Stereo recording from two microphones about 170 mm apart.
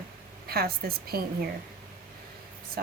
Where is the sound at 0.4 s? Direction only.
65° right (ahead or behind).